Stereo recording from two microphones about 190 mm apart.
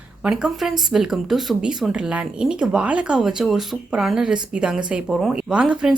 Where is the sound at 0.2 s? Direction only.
5° right (ahead or behind).